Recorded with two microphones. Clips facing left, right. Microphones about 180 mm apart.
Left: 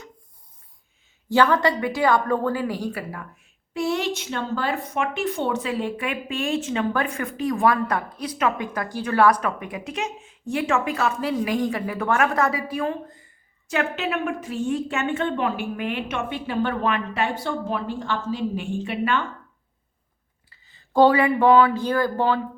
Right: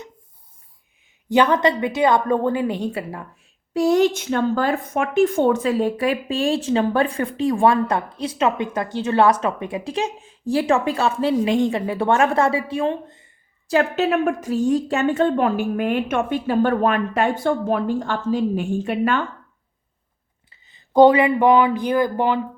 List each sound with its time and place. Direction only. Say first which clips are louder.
1.3 s a woman's voice: right 2 dB; 20° right (ahead or behind)
3.8 s speech: right 8 dB; 40° right (ahead or behind)
20.5 s speech: right 4 dB; 20° right (ahead or behind)